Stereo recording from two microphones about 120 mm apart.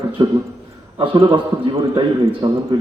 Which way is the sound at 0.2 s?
35° right (ahead or behind).